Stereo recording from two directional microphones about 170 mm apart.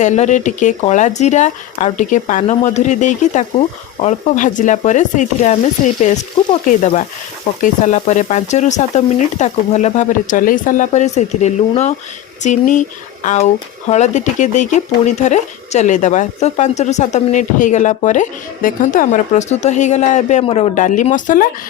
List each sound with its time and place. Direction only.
0.0 s speech: 45° left (ahead or behind)